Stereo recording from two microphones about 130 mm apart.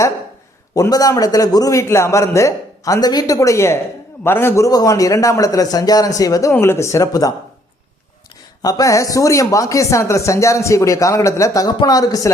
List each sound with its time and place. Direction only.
0.7 s speech: 25° left (ahead or behind)
8.6 s speech: 25° left (ahead or behind)